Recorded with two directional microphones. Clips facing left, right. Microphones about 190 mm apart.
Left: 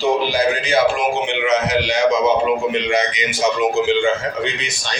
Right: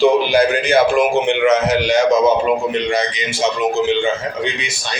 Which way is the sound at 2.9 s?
30° right (ahead or behind).